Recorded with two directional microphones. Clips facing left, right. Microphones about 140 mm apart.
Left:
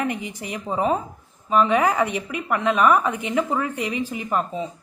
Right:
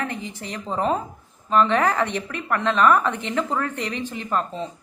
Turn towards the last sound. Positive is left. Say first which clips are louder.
# left 1 dB
turn(degrees=10)  # may be behind; listen again after turning